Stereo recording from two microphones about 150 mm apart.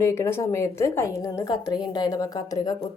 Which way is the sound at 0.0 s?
15° left (ahead or behind).